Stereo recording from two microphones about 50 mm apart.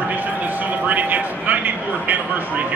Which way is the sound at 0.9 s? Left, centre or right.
Right.